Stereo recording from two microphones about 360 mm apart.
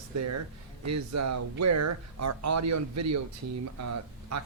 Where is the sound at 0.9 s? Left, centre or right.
Right.